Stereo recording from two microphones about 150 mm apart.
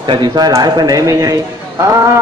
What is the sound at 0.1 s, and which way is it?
A man's voice, 30° right (ahead or behind).